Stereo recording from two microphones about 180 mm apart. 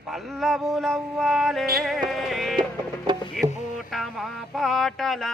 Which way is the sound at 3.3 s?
Centre (ahead or behind).